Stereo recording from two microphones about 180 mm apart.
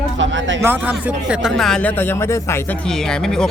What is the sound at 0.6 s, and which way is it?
Speech, 10° right (ahead or behind).